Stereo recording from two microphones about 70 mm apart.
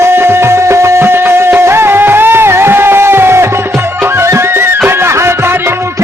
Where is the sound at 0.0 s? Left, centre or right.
Right.